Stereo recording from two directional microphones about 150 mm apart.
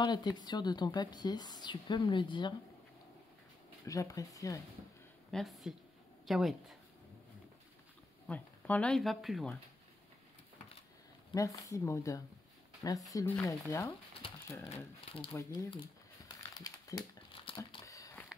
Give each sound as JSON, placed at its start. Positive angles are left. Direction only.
{"t": 0.0, "sound": "speech", "side_deg": 30}
{"t": 3.8, "sound": "speech", "side_deg": 20}
{"t": 5.3, "sound": "speech", "side_deg": 0}
{"t": 8.3, "sound": "speech", "side_deg": 10}
{"t": 11.3, "sound": "speech", "side_deg": 20}
{"t": 14.7, "sound": "speech", "side_deg": 35}
{"t": 15.3, "sound": "speech", "side_deg": 25}
{"t": 16.6, "sound": "crumpling", "side_deg": 25}
{"t": 17.8, "sound": "a sound", "side_deg": 20}